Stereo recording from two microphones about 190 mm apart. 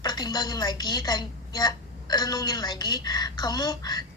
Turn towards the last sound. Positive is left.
turn(degrees=20)  # may be behind; listen again after turning